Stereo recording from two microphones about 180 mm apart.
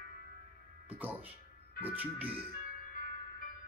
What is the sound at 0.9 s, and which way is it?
Speech, 10° right (ahead or behind).